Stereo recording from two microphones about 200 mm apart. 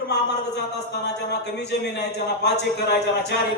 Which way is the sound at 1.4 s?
55° left (ahead or behind).